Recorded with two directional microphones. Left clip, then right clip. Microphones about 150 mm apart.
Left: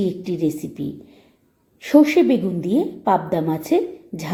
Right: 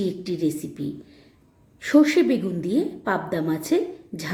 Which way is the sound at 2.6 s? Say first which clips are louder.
Left 3 dB; 10° left (ahead or behind).